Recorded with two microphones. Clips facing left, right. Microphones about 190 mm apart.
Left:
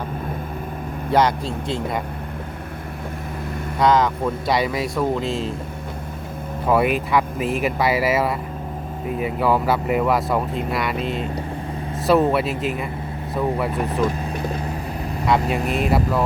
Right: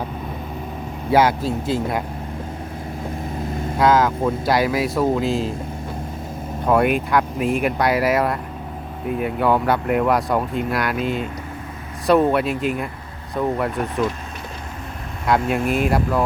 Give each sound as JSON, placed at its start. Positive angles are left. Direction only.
{"t": 1.1, "sound": "speech", "side_deg": -5}
{"t": 3.8, "sound": "speech", "side_deg": 0}
{"t": 6.7, "sound": "speech", "side_deg": 0}
{"t": 15.3, "sound": "speech", "side_deg": 0}